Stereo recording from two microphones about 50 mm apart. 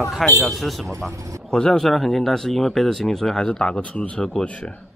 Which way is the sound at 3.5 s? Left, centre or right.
Centre.